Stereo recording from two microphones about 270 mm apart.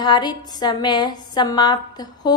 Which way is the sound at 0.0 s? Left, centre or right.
Centre.